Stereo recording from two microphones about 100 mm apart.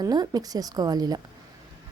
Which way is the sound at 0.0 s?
40° right (ahead or behind).